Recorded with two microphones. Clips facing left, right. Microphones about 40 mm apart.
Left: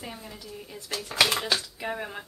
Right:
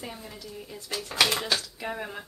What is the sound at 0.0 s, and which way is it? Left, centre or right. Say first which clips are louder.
Speech: even; centre.